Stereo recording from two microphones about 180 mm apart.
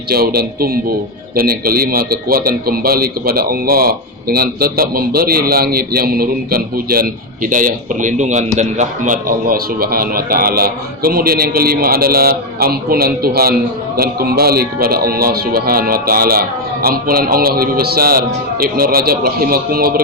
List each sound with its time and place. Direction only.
0.1 s speech: 60° right (ahead or behind)